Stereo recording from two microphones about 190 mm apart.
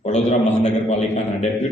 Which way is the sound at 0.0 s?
35° left (ahead or behind).